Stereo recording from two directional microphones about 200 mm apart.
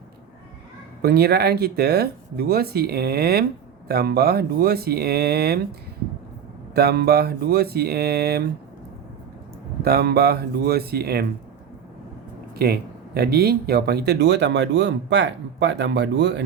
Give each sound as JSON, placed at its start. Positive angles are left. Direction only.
{"t": 1.0, "sound": "speech", "side_deg": -50}
{"t": 6.7, "sound": "speech", "side_deg": -50}
{"t": 9.8, "sound": "speech", "side_deg": -55}
{"t": 12.5, "sound": "speech", "side_deg": -50}